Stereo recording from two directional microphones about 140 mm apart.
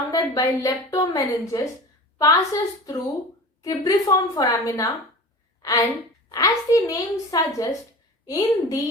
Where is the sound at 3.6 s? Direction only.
25° left (ahead or behind).